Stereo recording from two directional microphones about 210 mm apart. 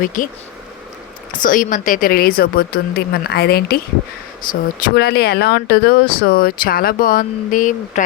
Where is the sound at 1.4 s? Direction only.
40° left (ahead or behind).